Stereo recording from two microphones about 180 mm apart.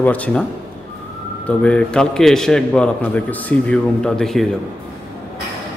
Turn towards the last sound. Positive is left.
turn(degrees=0)  # may be behind; listen again after turning